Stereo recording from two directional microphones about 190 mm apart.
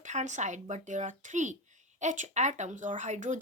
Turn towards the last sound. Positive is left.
turn(degrees=-40)  # may be behind; listen again after turning